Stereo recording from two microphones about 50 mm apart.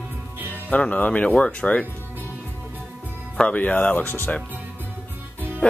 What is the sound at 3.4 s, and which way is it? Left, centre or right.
Speech, left.